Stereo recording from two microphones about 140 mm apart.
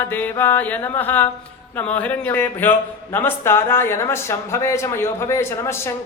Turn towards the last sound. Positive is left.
turn(degrees=20)  # may be behind; listen again after turning